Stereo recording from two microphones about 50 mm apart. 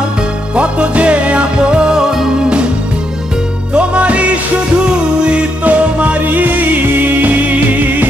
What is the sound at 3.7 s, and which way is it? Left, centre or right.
Music, right.